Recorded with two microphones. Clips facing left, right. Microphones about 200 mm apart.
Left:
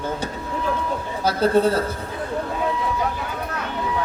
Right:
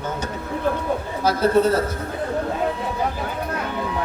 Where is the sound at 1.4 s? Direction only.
30° left (ahead or behind).